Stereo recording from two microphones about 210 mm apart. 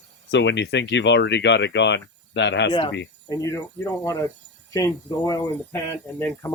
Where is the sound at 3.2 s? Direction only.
15° left (ahead or behind).